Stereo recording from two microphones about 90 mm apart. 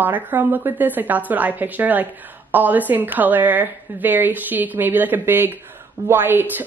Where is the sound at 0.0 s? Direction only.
20° right (ahead or behind).